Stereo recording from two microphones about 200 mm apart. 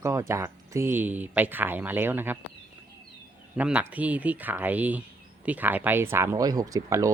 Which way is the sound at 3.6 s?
5° right (ahead or behind).